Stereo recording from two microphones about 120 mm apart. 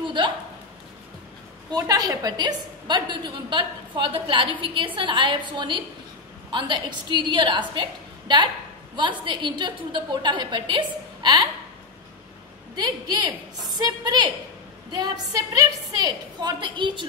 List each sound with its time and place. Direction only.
0.0 s a sound: 40° right (ahead or behind)
1.7 s a woman's voice: 30° right (ahead or behind)
8.9 s a woman's voice: 40° right (ahead or behind)
12.7 s a woman's voice: 35° right (ahead or behind)